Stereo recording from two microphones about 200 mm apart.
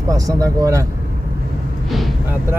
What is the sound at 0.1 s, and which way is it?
Speech, 15° right (ahead or behind).